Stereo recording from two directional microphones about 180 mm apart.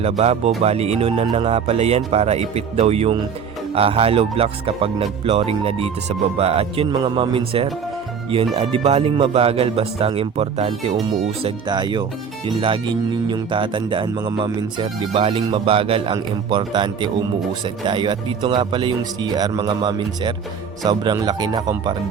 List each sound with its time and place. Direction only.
0.0 s speech: 35° right (ahead or behind)